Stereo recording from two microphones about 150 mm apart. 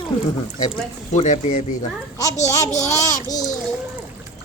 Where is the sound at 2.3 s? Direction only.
50° left (ahead or behind).